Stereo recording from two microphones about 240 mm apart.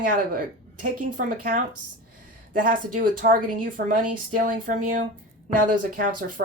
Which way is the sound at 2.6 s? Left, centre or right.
Right.